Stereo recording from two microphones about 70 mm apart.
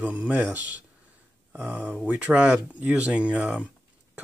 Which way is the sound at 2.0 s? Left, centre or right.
Centre.